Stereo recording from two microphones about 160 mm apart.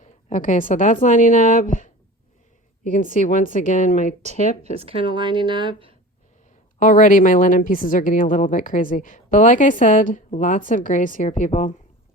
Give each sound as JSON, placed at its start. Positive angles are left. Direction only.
{"t": 0.0, "sound": "a woman's voice", "side_deg": 55}
{"t": 4.2, "sound": "speech", "side_deg": -45}
{"t": 6.7, "sound": "a woman's voice", "side_deg": 55}